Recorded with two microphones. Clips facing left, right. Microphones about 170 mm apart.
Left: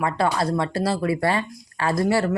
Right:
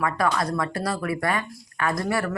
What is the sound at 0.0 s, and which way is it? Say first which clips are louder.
Speech: left 2 dB; 30° left (ahead or behind).